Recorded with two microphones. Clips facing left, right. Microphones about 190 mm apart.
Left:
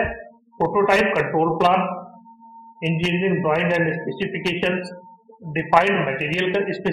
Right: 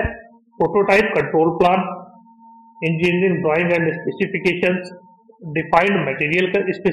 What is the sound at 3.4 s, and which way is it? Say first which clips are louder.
A man's voice: right 3 dB; 10° right (ahead or behind).